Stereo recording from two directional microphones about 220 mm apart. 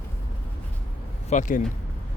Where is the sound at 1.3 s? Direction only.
30° left (ahead or behind).